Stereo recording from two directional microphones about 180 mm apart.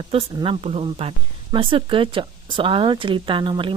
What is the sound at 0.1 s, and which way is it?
Speech, 30° right (ahead or behind).